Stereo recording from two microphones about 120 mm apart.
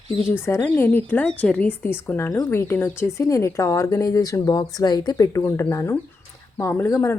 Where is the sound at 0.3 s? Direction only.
20° left (ahead or behind).